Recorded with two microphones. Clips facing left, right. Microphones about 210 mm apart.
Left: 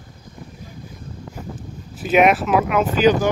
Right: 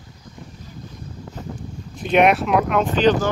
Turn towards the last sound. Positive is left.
turn(degrees=10)  # may be behind; listen again after turning